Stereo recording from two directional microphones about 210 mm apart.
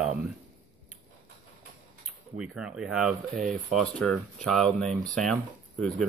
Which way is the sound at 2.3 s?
5° right (ahead or behind).